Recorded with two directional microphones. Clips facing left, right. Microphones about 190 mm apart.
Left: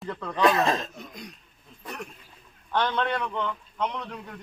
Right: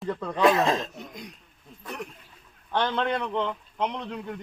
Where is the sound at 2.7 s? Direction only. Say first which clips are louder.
Even; 25° right (ahead or behind).